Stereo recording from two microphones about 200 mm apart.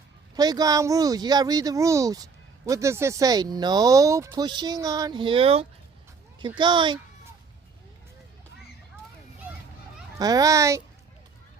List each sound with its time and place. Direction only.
0.3 s speech: 20° right (ahead or behind)
10.2 s a child's voice: 20° right (ahead or behind)